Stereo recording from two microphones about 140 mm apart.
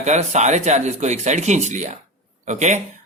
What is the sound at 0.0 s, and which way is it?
Speech, 55° right (ahead or behind).